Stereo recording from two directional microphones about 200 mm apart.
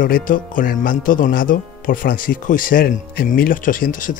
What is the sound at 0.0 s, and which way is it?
Speech, 45° left (ahead or behind).